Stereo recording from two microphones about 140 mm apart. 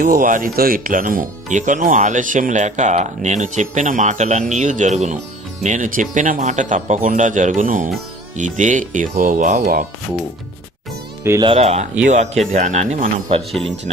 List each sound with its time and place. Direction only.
0.0 s speech: 80° right
11.2 s speech: 20° right (ahead or behind)
11.4 s speech: 50° right (ahead or behind)
13.5 s speech: centre (ahead or behind)